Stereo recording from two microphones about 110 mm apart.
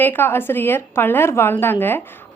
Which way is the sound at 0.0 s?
20° left (ahead or behind).